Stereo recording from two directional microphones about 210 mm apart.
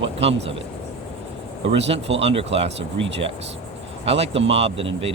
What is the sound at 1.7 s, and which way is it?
Speech, 30° right (ahead or behind).